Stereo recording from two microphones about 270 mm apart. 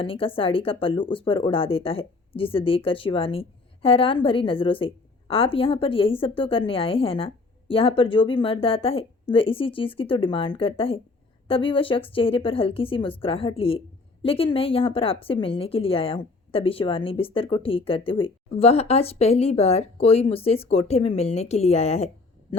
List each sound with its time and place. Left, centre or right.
0.0 s a woman's voice: centre